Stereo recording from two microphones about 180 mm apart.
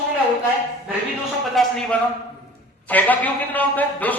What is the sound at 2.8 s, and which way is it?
A woman's voice, 10° left (ahead or behind).